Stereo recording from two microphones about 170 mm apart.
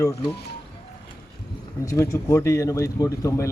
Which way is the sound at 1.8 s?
20° left (ahead or behind).